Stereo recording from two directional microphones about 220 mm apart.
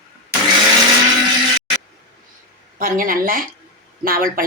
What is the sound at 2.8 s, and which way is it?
A woman's voice, 40° right (ahead or behind).